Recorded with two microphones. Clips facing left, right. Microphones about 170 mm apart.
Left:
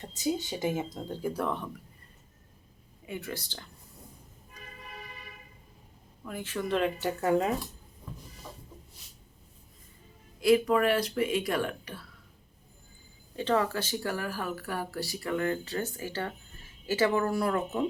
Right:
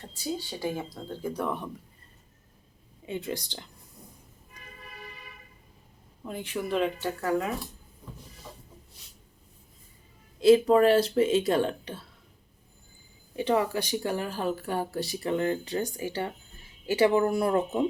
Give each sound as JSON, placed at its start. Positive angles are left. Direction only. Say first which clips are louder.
{"t": 0.0, "sound": "speech", "louder": "left 3 dB", "side_deg": 15}
{"t": 1.5, "sound": "a woman's voice", "louder": "right 1 dB", "side_deg": -10}
{"t": 3.1, "sound": "speech", "louder": "right 4 dB", "side_deg": -20}
{"t": 6.2, "sound": "a woman's voice", "louder": "right 2 dB", "side_deg": -20}
{"t": 6.7, "sound": "speech", "louder": "right 1 dB", "side_deg": 0}
{"t": 7.0, "sound": "speech", "louder": "left 2 dB", "side_deg": 20}
{"t": 10.4, "sound": "speech", "louder": "right 5 dB", "side_deg": -30}
{"t": 13.3, "sound": "speech", "louder": "right 2 dB", "side_deg": -15}